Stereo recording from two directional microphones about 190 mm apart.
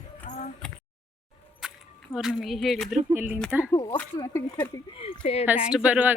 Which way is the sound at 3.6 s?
20° left (ahead or behind).